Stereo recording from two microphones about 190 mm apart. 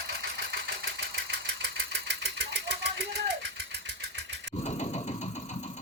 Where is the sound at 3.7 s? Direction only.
70° right (ahead or behind).